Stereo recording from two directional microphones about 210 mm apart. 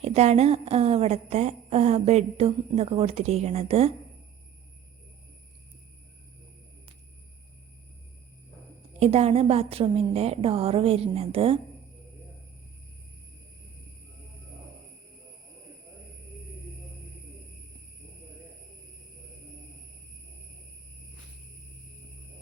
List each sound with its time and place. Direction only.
0.0 s a woman's voice: 30° right (ahead or behind)
9.0 s a woman's voice: 30° right (ahead or behind)